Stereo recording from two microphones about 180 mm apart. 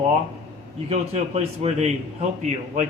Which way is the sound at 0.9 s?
35° right (ahead or behind).